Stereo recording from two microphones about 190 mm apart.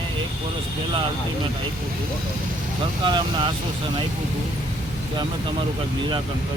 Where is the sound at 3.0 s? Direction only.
25° right (ahead or behind).